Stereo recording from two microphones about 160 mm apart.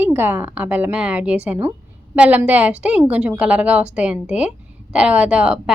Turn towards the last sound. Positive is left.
turn(degrees=-5)  # may be behind; listen again after turning